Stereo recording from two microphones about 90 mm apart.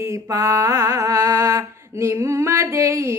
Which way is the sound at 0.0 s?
35° right (ahead or behind).